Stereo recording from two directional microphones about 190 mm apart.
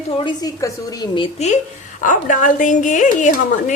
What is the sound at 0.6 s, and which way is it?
Speech, 15° left (ahead or behind).